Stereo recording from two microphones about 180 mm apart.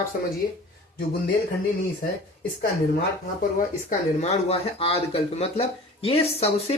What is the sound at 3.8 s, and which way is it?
Speech, 40° left (ahead or behind).